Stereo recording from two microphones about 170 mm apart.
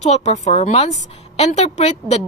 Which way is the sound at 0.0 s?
40° left (ahead or behind).